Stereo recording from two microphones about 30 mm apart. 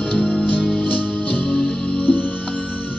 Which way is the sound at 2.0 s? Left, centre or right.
Left.